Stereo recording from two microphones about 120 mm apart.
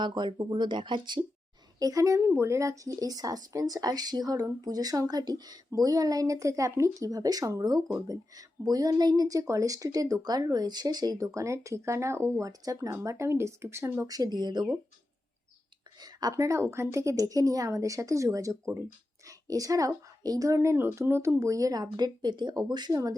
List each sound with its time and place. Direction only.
0.0 s speech: 40° right (ahead or behind)
1.8 s speech: 30° right (ahead or behind)
14.1 s speech: 35° right (ahead or behind)
16.0 s a sound: 35° right (ahead or behind)
16.3 s speech: 25° right (ahead or behind)